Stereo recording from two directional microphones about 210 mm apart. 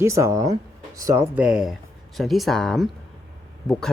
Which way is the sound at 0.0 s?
15° right (ahead or behind).